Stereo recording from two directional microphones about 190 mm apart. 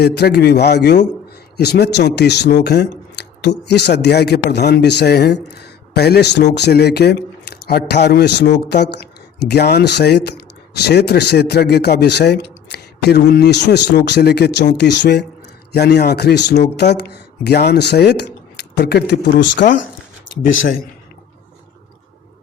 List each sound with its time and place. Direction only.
0.0 s speech: 60° left (ahead or behind)